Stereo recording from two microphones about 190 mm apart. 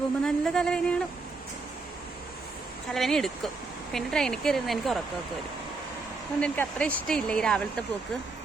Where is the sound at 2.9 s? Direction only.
Centre (ahead or behind).